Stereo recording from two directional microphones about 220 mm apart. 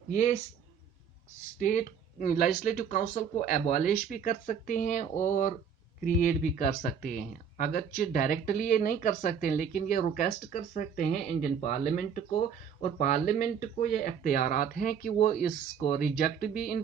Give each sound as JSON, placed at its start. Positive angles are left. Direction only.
{"t": 0.1, "sound": "speech", "side_deg": 35}
{"t": 1.5, "sound": "speech", "side_deg": 35}